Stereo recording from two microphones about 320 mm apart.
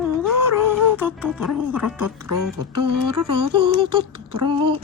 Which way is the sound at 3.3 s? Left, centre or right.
Centre.